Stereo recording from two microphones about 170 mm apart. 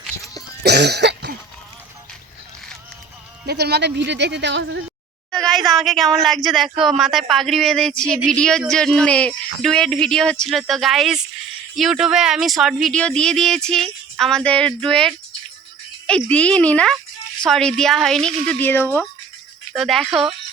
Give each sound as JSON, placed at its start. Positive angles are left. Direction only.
{"t": 0.6, "sound": "cough", "side_deg": -75}
{"t": 3.4, "sound": "speech", "side_deg": -75}
{"t": 5.5, "sound": "speech", "side_deg": 0}
{"t": 19.7, "sound": "speech", "side_deg": 0}